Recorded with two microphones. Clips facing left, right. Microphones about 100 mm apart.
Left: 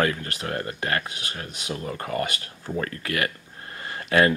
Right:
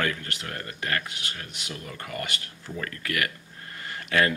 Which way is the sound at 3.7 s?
30° left (ahead or behind).